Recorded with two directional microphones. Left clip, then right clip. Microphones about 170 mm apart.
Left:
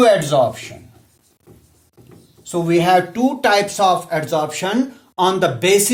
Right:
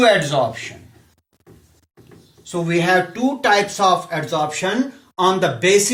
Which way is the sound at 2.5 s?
55° left (ahead or behind).